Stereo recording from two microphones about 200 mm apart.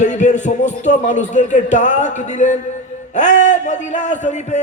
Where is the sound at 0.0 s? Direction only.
35° left (ahead or behind).